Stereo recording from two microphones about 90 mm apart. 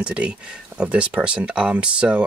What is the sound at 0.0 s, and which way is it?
Speech, 10° right (ahead or behind).